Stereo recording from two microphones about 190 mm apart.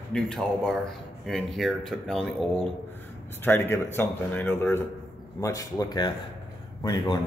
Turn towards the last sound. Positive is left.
turn(degrees=20)  # may be behind; listen again after turning